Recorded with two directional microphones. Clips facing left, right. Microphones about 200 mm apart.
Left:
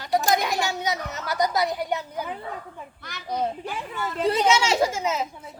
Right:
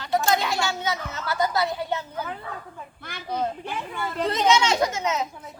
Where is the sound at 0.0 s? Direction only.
15° left (ahead or behind).